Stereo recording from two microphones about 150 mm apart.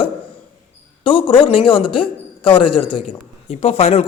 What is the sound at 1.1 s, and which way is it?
A man's voice, 35° left (ahead or behind).